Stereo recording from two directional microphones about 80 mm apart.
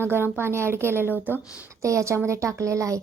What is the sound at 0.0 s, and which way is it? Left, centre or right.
A woman's voice, right.